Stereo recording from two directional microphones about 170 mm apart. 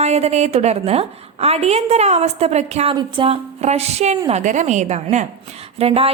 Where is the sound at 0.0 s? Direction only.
40° right (ahead or behind).